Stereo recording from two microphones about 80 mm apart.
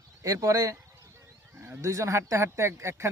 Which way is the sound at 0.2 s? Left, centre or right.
Right.